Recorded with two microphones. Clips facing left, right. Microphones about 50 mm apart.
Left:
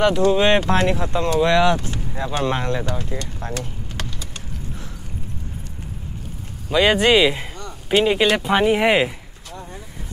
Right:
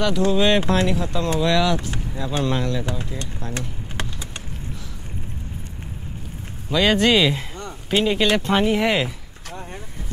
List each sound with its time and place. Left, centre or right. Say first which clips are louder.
0.3 s speech: left 2 dB; left
2.8 s speech: left 2 dB; right
3.5 s vehicle: even; right
6.7 s speech: left 2 dB; centre